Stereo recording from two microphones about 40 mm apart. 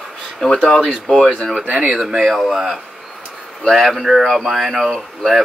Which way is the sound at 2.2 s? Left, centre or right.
Centre.